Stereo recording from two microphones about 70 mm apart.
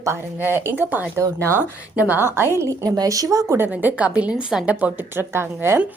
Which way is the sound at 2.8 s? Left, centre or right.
Right.